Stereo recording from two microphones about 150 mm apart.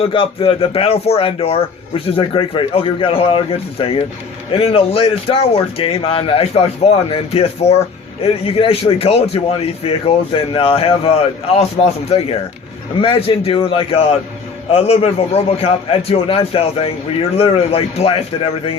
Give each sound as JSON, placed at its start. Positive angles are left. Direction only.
{"t": 0.0, "sound": "a man's voice", "side_deg": 35}